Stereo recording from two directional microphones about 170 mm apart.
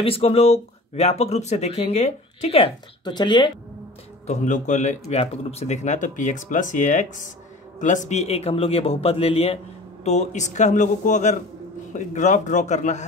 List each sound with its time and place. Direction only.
0.0 s speech: 35° left (ahead or behind)
4.3 s speech: 45° left (ahead or behind)